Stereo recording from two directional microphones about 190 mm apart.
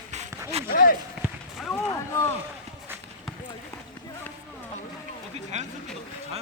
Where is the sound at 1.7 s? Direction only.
15° left (ahead or behind).